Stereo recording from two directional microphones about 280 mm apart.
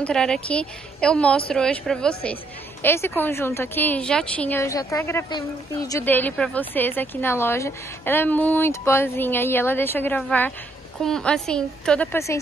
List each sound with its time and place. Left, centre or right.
0.0 s a woman's voice: centre